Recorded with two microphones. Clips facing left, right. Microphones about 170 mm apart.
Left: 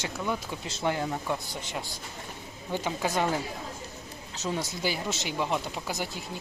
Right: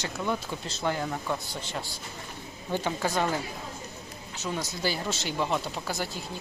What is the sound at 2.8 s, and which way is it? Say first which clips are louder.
Speech: even; 15° left (ahead or behind).